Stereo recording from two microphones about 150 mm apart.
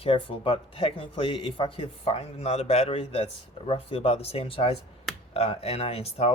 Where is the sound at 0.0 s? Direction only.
35° left (ahead or behind).